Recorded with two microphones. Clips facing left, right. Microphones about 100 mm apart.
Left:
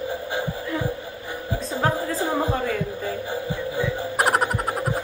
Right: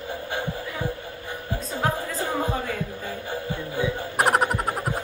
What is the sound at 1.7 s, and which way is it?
Music, 40° left (ahead or behind).